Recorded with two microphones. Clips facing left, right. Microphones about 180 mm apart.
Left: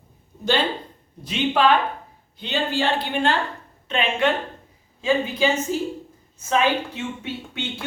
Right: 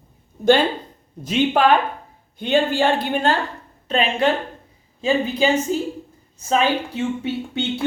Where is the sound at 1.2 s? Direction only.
45° right (ahead or behind).